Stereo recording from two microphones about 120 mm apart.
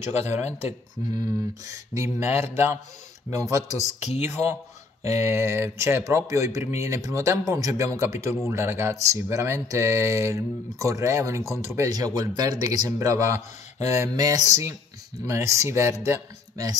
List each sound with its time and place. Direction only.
0.2 s speech: 70° left (ahead or behind)
1.7 s speech: 20° right (ahead or behind)
4.0 s speech: 70° left (ahead or behind)
5.2 s speech: 20° right (ahead or behind)